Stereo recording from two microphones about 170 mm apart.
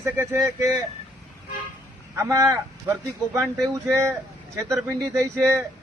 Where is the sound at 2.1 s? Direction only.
20° right (ahead or behind).